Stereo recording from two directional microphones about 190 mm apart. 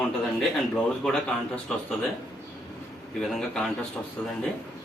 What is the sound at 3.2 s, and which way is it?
Speech, centre (ahead or behind).